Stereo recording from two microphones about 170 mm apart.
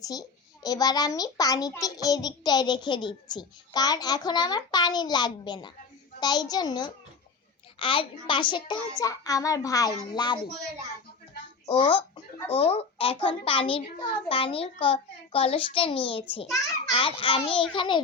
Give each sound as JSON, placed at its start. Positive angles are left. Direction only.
{"t": 0.0, "sound": "a child's voice", "side_deg": 20}
{"t": 11.7, "sound": "a child's voice", "side_deg": 30}